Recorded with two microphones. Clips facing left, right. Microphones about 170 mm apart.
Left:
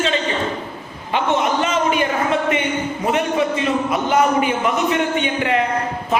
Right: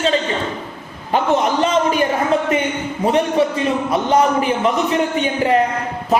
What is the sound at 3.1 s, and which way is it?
A man's voice, 35° right (ahead or behind).